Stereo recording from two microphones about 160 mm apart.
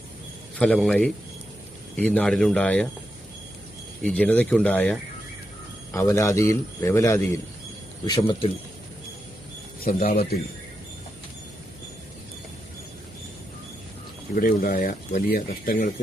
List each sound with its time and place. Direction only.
0.6 s speech: 5° left (ahead or behind)
4.0 s speech: 10° left (ahead or behind)
8.0 s speech: 30° left (ahead or behind)
9.8 s speech: 65° left (ahead or behind)
14.3 s speech: 65° left (ahead or behind)